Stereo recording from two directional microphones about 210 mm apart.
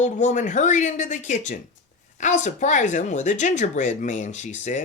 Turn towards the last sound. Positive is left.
turn(degrees=35)  # may be behind; listen again after turning